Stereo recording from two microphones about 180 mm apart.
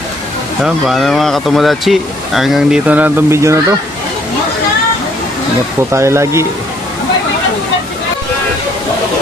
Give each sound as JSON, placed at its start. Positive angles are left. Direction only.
{"t": 0.6, "sound": "speech", "side_deg": 0}
{"t": 5.9, "sound": "speech", "side_deg": -15}